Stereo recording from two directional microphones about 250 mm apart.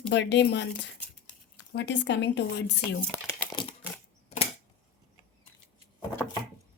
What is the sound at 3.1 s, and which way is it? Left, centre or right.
Speech, centre.